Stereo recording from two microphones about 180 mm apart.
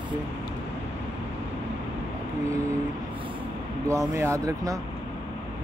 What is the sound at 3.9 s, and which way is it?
Speech, 15° right (ahead or behind).